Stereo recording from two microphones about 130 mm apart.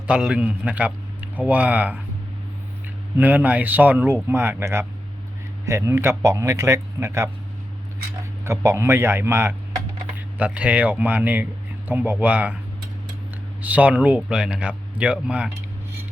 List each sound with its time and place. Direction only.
0.1 s speech: 5° right (ahead or behind)
3.2 s speech: 10° right (ahead or behind)
8.4 s speech: 20° right (ahead or behind)
13.6 s speech: 10° right (ahead or behind)